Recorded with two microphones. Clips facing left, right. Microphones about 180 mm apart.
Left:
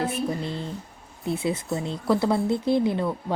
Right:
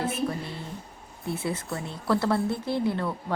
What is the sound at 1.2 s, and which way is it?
Speech, 20° left (ahead or behind).